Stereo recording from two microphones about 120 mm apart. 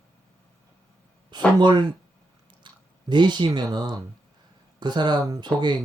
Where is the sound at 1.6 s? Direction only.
40° right (ahead or behind).